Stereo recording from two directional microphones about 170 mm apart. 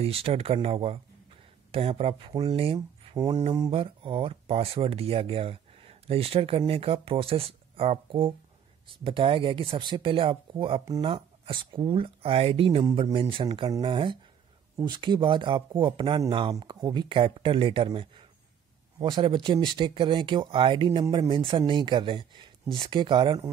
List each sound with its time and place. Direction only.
0.0 s speech: 35° right (ahead or behind)